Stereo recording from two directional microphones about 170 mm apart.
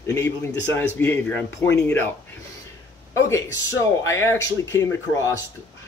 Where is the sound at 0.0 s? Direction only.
15° left (ahead or behind).